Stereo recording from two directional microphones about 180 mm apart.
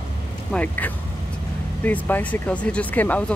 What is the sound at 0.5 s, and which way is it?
Speech, 10° left (ahead or behind).